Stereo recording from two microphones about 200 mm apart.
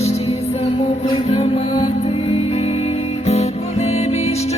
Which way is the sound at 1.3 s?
30° left (ahead or behind).